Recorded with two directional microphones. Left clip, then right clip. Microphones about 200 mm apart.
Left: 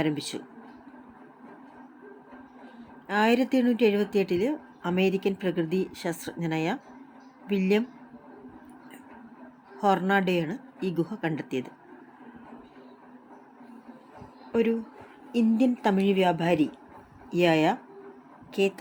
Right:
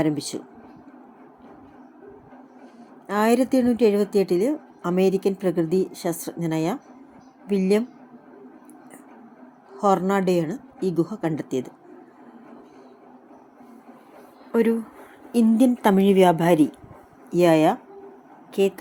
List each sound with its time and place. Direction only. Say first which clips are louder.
0.0 s a woman's voice: right 5 dB; 10° right (ahead or behind)
3.1 s a woman's voice: right 4 dB; 15° right (ahead or behind)
9.7 s a woman's voice: right 3 dB; 10° right (ahead or behind)
14.5 s a woman's voice: right 4 dB; 15° right (ahead or behind)